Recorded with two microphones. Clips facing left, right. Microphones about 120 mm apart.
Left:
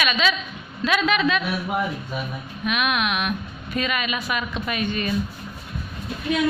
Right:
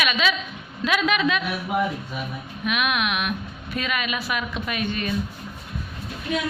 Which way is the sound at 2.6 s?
5° right (ahead or behind).